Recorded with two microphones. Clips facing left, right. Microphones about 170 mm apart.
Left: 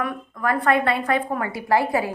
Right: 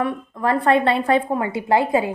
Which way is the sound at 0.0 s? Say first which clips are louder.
Right 4 dB; 25° right (ahead or behind).